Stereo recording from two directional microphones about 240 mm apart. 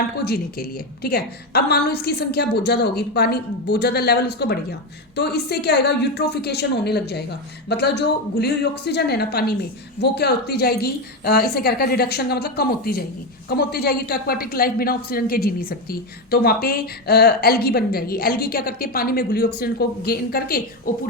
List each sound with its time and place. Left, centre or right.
0.3 s a woman's voice: left